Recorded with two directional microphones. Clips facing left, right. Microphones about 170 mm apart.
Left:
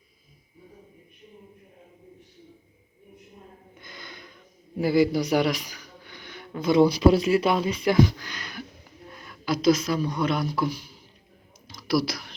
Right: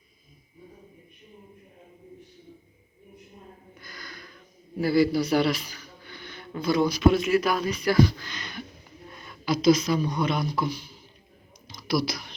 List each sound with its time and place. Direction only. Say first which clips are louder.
3.8 s gasp: left 1 dB; 20° left (ahead or behind)
4.8 s speech: left 1 dB; 15° left (ahead or behind)
8.1 s speech: even; 10° left (ahead or behind)